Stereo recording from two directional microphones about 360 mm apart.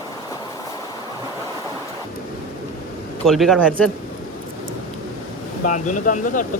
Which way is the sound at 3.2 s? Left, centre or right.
Centre.